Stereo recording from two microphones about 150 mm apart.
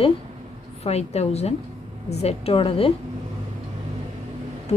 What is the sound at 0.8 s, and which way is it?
A woman's voice, 45° left (ahead or behind).